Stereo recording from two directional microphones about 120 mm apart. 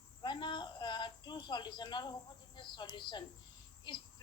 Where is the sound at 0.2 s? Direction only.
40° left (ahead or behind).